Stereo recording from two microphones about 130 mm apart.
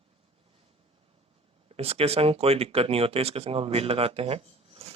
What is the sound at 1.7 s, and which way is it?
Speech, 50° right (ahead or behind).